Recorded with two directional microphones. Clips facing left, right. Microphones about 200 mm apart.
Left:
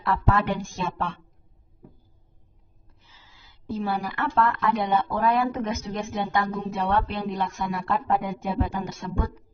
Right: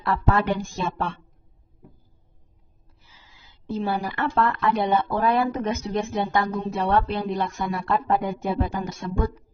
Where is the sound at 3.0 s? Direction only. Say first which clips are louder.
Right 1 dB; 10° right (ahead or behind); by 8.5 s 35° right (ahead or behind).